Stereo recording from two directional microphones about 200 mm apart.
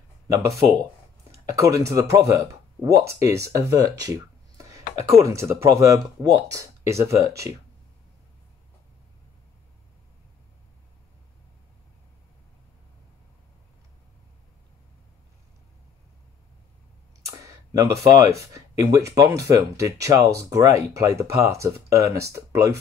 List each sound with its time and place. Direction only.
1.3 s speech: 15° right (ahead or behind)
17.3 s speech: 15° right (ahead or behind)